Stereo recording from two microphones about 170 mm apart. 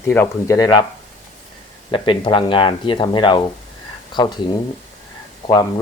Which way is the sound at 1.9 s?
30° left (ahead or behind).